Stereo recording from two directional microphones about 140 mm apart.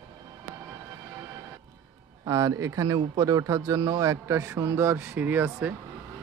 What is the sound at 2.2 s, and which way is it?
A man's voice, 25° right (ahead or behind).